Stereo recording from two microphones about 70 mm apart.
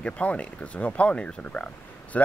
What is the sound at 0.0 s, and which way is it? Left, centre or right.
Speech, centre.